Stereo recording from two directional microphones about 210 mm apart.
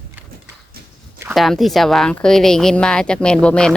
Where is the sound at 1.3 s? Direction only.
Centre (ahead or behind).